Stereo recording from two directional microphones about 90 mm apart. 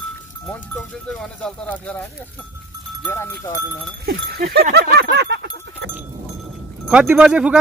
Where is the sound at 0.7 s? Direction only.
5° left (ahead or behind).